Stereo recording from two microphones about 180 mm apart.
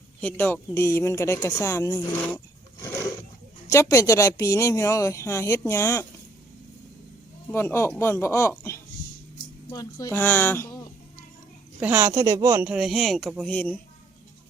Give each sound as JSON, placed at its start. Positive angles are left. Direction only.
{"t": 0.2, "sound": "speech", "side_deg": 10}
{"t": 3.7, "sound": "speech", "side_deg": 15}
{"t": 7.5, "sound": "speech", "side_deg": 15}
{"t": 11.8, "sound": "speech", "side_deg": -10}
{"t": 12.6, "sound": "a woman's voice", "side_deg": -5}